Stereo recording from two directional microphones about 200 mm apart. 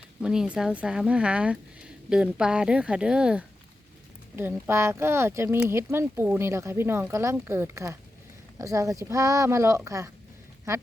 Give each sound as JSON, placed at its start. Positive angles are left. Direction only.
{"t": 0.2, "sound": "speech", "side_deg": -5}